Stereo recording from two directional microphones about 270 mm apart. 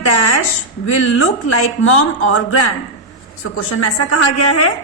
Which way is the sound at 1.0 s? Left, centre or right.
Left.